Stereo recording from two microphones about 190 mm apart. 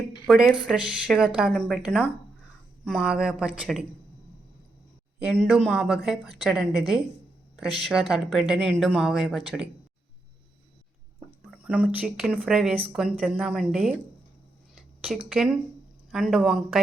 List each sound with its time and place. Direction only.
0.3 s speech: centre (ahead or behind)
5.2 s speech: centre (ahead or behind)
11.4 s speech: 5° right (ahead or behind)
14.8 s a sound: centre (ahead or behind)
16.1 s speech: centre (ahead or behind)